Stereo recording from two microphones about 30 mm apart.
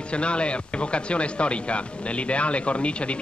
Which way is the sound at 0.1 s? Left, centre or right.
Left.